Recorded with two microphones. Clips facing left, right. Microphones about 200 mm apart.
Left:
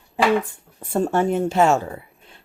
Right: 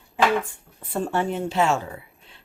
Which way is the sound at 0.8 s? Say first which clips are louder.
Left 5 dB; 45° left (ahead or behind).